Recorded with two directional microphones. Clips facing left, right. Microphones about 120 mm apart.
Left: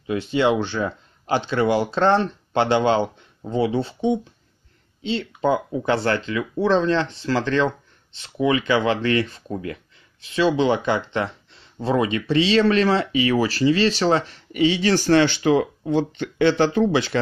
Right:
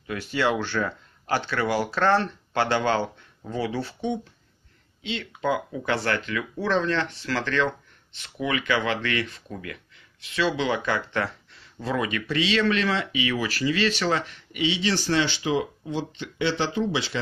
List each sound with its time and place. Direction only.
0.0 s speech: 20° left (ahead or behind)
5.0 s speech: 30° left (ahead or behind); by 17.2 s 55° left (ahead or behind)